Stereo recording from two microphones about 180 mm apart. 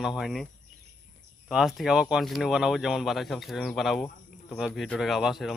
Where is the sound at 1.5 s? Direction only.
Centre (ahead or behind).